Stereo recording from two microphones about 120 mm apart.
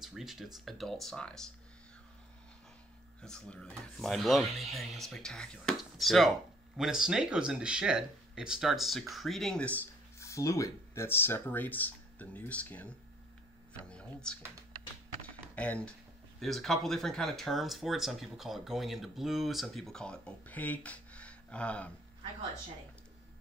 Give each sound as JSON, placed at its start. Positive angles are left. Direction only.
{"t": 0.0, "sound": "speech", "side_deg": -5}
{"t": 3.2, "sound": "speech", "side_deg": 5}
{"t": 10.1, "sound": "speech", "side_deg": 25}
{"t": 15.5, "sound": "speech", "side_deg": 10}